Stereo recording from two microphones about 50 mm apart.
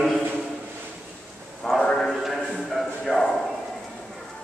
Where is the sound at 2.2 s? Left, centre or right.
Centre.